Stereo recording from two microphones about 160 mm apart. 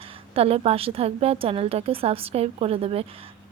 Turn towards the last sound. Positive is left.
turn(degrees=-35)  # may be behind; listen again after turning